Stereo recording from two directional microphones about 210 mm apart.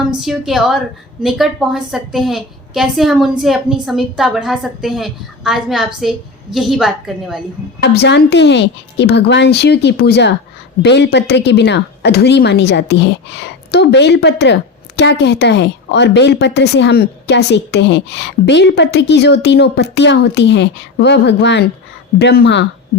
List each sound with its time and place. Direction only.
0.0 s a woman's voice: centre (ahead or behind)
7.8 s speech: 55° left (ahead or behind)